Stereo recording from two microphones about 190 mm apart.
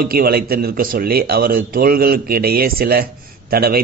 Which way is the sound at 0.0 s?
55° right (ahead or behind).